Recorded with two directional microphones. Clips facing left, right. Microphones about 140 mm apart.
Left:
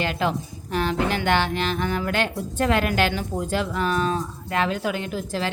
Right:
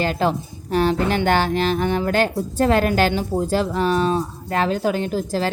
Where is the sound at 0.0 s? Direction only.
35° right (ahead or behind).